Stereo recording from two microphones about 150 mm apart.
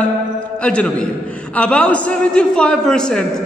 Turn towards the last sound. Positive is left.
turn(degrees=5)  # may be behind; listen again after turning